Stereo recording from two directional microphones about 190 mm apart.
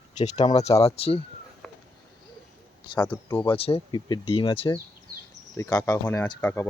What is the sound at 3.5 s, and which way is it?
Speech, 30° left (ahead or behind).